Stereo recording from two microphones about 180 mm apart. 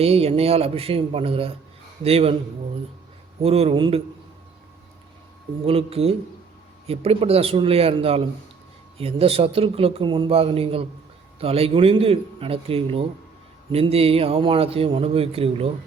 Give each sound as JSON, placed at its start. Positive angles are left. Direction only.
{"t": 0.0, "sound": "speech", "side_deg": -35}
{"t": 3.4, "sound": "speech", "side_deg": -35}
{"t": 5.6, "sound": "speech", "side_deg": -35}